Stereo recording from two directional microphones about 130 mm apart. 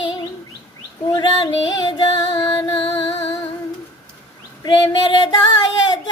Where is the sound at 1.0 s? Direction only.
30° left (ahead or behind).